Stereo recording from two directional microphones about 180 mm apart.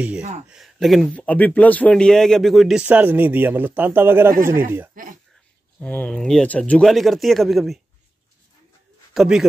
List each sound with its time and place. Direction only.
0.5 s speech: centre (ahead or behind)
4.9 s speech: 50° right (ahead or behind)
5.8 s speech: 10° left (ahead or behind)
9.1 s speech: centre (ahead or behind)